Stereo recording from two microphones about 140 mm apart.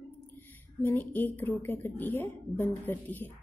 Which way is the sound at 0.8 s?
15° left (ahead or behind).